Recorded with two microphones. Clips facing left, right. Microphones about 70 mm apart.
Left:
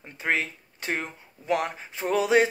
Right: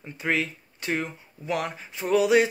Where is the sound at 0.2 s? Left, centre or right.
Left.